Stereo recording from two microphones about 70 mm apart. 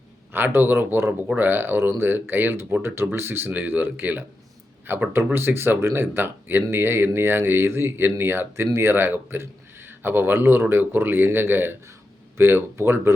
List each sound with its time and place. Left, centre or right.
0.3 s speech: right